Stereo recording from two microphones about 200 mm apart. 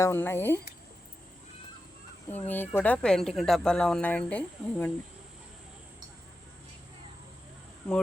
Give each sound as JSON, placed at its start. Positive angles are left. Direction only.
{"t": 0.0, "sound": "speech", "side_deg": 10}
{"t": 2.3, "sound": "speech", "side_deg": 10}